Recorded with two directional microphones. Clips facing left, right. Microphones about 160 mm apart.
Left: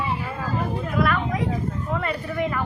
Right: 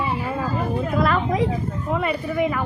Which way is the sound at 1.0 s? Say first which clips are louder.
Right 1 dB; 30° right (ahead or behind).